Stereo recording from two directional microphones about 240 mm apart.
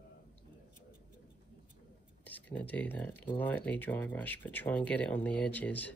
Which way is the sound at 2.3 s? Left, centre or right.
Centre.